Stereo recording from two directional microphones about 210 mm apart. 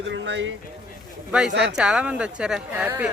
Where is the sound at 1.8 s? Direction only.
5° right (ahead or behind).